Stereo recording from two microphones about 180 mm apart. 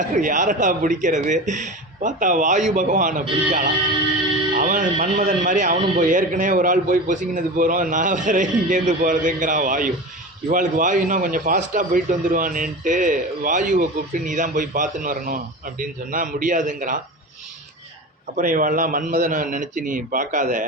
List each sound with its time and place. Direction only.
0.0 s a man's voice: 45° right (ahead or behind)
18.3 s a man's voice: 50° right (ahead or behind)